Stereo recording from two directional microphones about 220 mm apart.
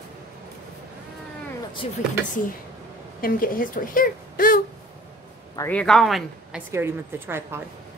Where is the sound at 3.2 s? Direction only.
40° left (ahead or behind).